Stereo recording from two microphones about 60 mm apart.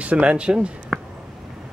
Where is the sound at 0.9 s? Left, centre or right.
Centre.